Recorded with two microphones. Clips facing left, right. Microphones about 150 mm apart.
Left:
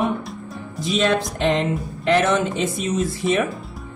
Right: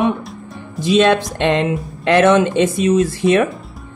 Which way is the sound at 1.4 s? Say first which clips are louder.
Right 4 dB; 75° right (ahead or behind).